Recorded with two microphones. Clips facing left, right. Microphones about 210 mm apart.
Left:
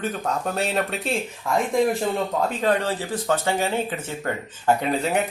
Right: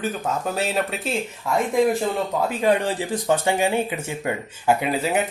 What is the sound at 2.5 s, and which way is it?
Speech, 15° right (ahead or behind).